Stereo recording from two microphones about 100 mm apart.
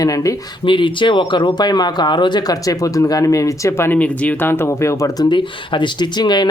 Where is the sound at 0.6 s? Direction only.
55° left (ahead or behind); by 5.3 s 30° left (ahead or behind).